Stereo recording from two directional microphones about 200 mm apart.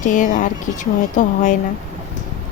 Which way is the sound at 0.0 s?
40° left (ahead or behind).